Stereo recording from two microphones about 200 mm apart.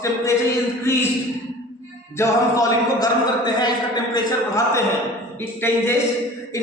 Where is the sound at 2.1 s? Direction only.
15° left (ahead or behind).